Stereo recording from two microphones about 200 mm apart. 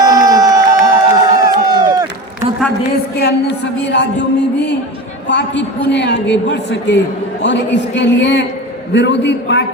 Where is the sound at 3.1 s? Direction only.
55° left (ahead or behind).